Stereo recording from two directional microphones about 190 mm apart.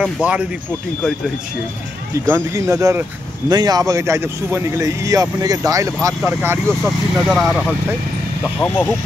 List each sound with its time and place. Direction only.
0.0 s speech: 5° right (ahead or behind)
2.2 s speech: 15° right (ahead or behind)
6.8 s speech: centre (ahead or behind)
8.5 s speech: 10° left (ahead or behind)